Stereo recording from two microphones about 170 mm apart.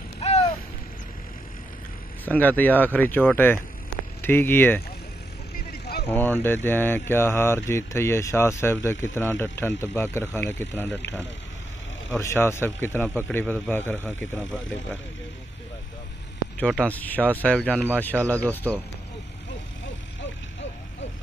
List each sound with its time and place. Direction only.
0.2 s a sound: 40° left (ahead or behind)
2.2 s speech: 10° left (ahead or behind)
5.7 s vehicle: 65° left (ahead or behind)
6.0 s speech: 10° left (ahead or behind)
12.2 s speech: 15° left (ahead or behind)
16.5 s speech: 5° left (ahead or behind)
18.1 s speech: 15° right (ahead or behind)
18.4 s speech: 10° left (ahead or behind)